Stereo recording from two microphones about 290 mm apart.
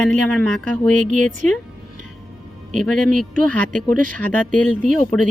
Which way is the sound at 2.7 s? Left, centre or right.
Centre.